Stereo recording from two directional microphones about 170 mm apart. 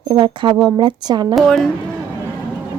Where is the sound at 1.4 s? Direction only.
Centre (ahead or behind).